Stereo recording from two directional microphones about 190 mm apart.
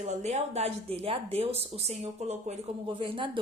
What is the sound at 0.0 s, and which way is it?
A woman's voice, 35° right (ahead or behind).